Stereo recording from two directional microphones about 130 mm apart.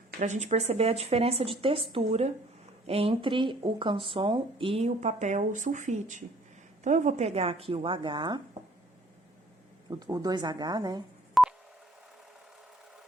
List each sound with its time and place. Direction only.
0.2 s speech: 65° right (ahead or behind); by 2.0 s 45° right (ahead or behind)
2.0 s speech: 55° right (ahead or behind); by 8.4 s 35° right (ahead or behind)
9.9 s speech: 30° right (ahead or behind)
11.4 s telephone dialing: centre (ahead or behind)